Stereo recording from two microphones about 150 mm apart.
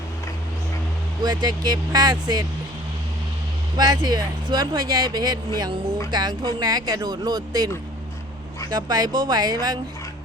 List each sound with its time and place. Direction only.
1.2 s speech: 30° right (ahead or behind)
3.8 s speech: 25° right (ahead or behind)
8.7 s speech: 25° right (ahead or behind)